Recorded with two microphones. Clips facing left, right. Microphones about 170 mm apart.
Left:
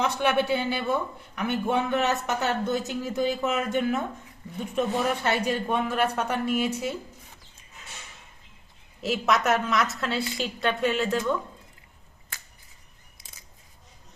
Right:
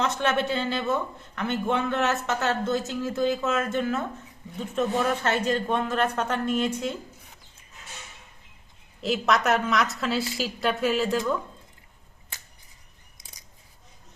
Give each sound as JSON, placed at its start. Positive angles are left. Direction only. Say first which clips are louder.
{"t": 0.0, "sound": "a man's voice", "louder": "left 1 dB", "side_deg": 10}
{"t": 9.0, "sound": "a woman's voice", "louder": "right 1 dB", "side_deg": 0}